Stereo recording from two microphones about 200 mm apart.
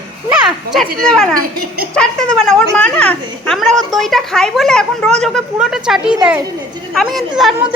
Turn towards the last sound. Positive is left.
turn(degrees=0)  # may be behind; listen again after turning